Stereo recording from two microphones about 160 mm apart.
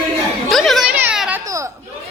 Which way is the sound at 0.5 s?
Centre (ahead or behind).